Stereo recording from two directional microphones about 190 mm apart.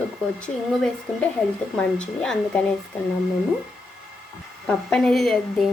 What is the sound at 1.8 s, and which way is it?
Speech, 5° left (ahead or behind).